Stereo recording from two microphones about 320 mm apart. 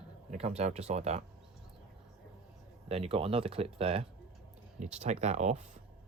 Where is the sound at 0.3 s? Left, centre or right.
Centre.